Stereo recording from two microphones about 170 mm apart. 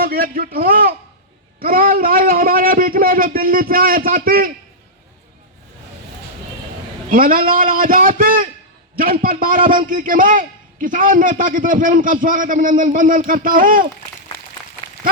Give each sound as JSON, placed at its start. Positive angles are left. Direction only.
{"t": 0.0, "sound": "a man's voice", "side_deg": -60}
{"t": 7.1, "sound": "a man's voice", "side_deg": -55}